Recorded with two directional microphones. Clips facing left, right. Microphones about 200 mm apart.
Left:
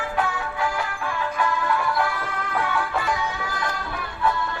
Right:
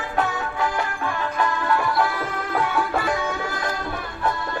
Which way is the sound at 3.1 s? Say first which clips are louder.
Right 2 dB; 50° right (ahead or behind).